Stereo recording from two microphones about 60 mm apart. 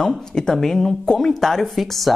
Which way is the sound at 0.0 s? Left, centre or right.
Centre.